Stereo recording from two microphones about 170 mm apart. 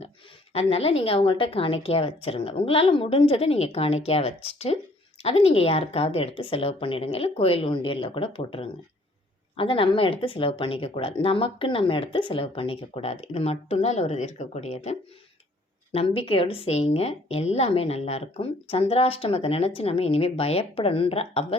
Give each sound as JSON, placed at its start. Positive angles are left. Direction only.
{"t": 0.5, "sound": "a woman's voice", "side_deg": 35}